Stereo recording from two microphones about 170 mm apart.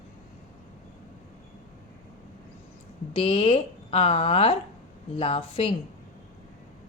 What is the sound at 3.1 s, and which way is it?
A woman's voice, 35° left (ahead or behind).